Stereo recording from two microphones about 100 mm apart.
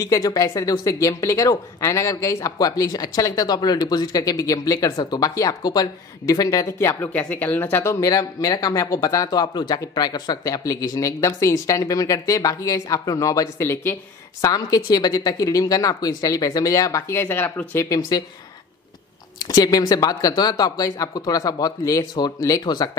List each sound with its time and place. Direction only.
0.0 s speech: 35° left (ahead or behind); by 7.9 s 20° left (ahead or behind)
7.9 s speech: 35° left (ahead or behind)
14.4 s speech: 40° left (ahead or behind)
17.2 s speech: 20° left (ahead or behind)
17.8 s speech: 35° left (ahead or behind)
19.3 s speech: 40° left (ahead or behind)